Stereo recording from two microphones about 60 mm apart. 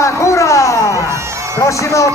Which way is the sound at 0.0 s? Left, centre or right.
Left.